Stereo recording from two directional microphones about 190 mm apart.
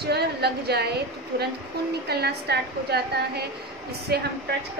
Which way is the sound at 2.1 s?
60° right (ahead or behind).